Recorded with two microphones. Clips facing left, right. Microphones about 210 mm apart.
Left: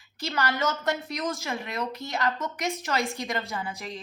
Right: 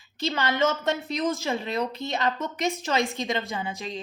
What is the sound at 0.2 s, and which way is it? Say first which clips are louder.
Speech: right 4 dB; 20° right (ahead or behind).